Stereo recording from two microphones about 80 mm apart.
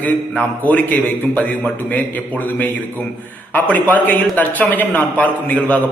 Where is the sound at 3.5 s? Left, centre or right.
Left.